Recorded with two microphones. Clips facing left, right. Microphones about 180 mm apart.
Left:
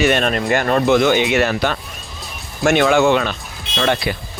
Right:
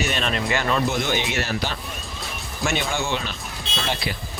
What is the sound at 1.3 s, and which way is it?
Speech, 65° left (ahead or behind).